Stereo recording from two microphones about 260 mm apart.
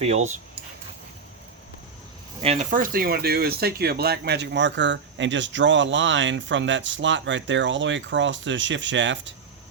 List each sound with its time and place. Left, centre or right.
0.0 s speech: right
2.4 s speech: right